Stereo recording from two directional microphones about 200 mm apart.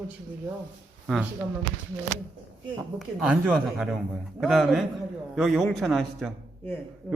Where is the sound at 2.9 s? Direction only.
5° right (ahead or behind).